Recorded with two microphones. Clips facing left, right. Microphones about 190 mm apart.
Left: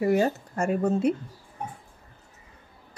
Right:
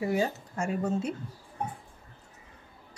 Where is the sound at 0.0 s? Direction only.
55° left (ahead or behind).